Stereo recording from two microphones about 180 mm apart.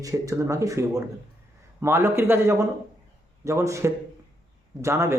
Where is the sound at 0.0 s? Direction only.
20° right (ahead or behind).